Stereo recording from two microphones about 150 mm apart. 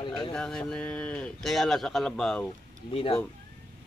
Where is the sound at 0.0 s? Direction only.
30° left (ahead or behind).